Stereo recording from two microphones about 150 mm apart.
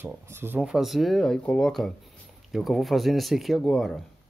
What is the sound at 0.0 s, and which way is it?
Speech, 15° right (ahead or behind).